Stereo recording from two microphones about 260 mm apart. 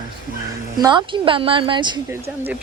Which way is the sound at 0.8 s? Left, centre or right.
Centre.